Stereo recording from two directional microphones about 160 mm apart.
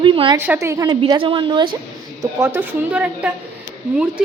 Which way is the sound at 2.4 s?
10° right (ahead or behind).